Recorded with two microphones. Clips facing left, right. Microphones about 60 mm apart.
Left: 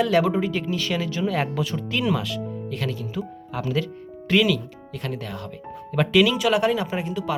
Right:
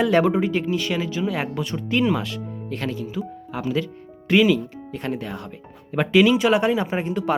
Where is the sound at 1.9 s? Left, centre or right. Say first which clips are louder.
Right 5 dB; right.